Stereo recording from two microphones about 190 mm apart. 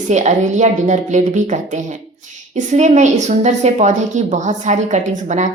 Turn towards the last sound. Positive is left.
turn(degrees=-40)  # may be behind; listen again after turning